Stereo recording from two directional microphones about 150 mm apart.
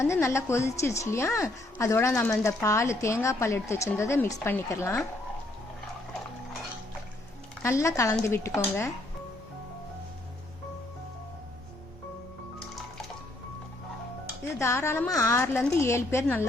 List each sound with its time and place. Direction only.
0.0 s speech: 20° left (ahead or behind)
7.6 s speech: 20° left (ahead or behind)
14.6 s speech: 20° left (ahead or behind)